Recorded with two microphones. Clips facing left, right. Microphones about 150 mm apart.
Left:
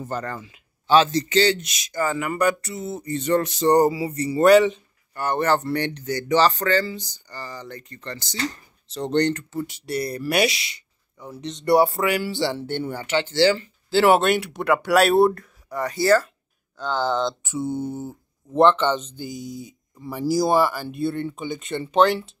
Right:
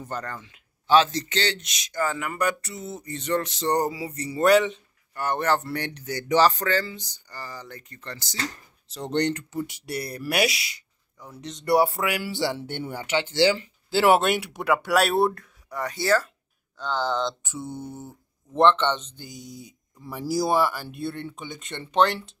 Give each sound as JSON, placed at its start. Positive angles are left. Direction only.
{"t": 0.0, "sound": "a man's voice", "side_deg": 5}
{"t": 17.6, "sound": "speech", "side_deg": 30}
{"t": 18.6, "sound": "a man's voice", "side_deg": 5}